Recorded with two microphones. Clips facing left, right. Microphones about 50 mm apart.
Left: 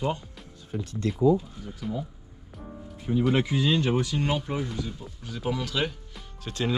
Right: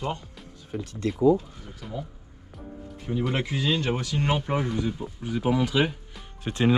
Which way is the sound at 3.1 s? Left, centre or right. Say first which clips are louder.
Left 3 dB; centre.